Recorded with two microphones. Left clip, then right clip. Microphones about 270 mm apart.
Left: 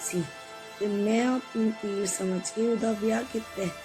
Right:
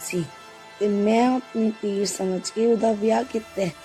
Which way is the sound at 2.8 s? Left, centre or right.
Right.